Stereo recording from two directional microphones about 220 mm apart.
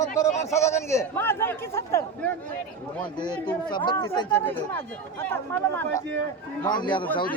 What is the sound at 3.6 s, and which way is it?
A man's voice, 20° left (ahead or behind).